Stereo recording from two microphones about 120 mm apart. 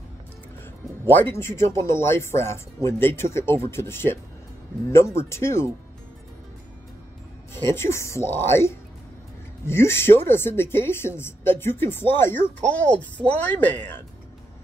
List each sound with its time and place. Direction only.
1.3 s a woman's voice: 20° left (ahead or behind)
7.5 s a woman's voice: 20° left (ahead or behind)